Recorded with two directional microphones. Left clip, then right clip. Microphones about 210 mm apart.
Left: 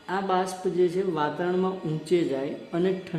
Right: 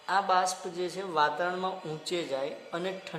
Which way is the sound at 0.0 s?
15° right (ahead or behind).